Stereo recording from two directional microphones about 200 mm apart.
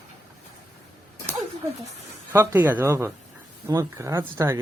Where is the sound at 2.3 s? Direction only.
10° right (ahead or behind).